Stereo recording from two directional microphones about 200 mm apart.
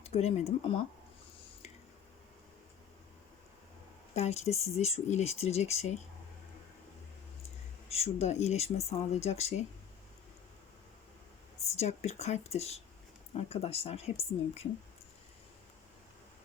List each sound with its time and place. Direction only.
0.0 s speech: 30° left (ahead or behind)
4.1 s speech: 30° left (ahead or behind)
7.9 s speech: 30° left (ahead or behind)
11.8 s speech: 35° left (ahead or behind)